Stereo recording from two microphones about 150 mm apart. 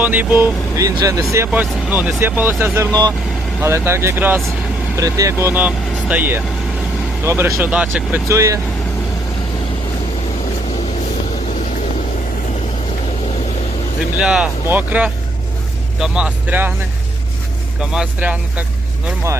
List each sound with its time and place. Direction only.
0.0 s speech: 10° right (ahead or behind)
8.3 s speech: 20° right (ahead or behind)
14.2 s speech: 5° right (ahead or behind)
17.7 s speech: 5° right (ahead or behind)